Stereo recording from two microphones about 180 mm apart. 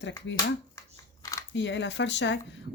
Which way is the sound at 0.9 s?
20° left (ahead or behind).